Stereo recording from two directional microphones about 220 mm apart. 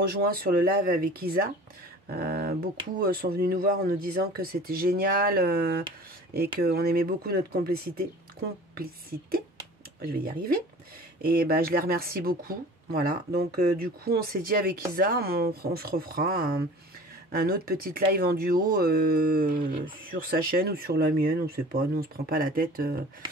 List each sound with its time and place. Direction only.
0.0 s speech: 45° right (ahead or behind)
10.0 s speech: 40° right (ahead or behind)